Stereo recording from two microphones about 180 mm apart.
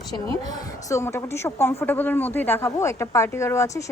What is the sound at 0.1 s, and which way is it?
Speech, 20° left (ahead or behind).